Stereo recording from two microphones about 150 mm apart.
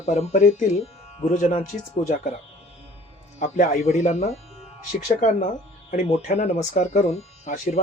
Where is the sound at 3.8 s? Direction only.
50° left (ahead or behind).